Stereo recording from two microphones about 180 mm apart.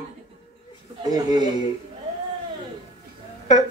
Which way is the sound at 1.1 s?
20° right (ahead or behind).